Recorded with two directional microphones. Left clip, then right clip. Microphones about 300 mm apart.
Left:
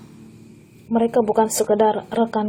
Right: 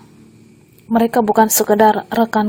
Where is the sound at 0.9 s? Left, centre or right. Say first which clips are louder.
Right 4 dB; right.